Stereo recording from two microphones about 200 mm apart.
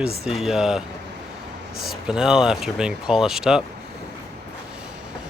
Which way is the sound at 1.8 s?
5° right (ahead or behind).